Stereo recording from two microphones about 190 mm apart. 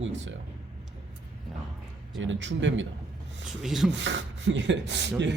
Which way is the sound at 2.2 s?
75° right (ahead or behind).